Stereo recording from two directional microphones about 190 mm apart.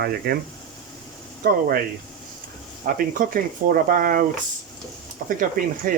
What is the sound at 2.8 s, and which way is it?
Speech, 45° right (ahead or behind).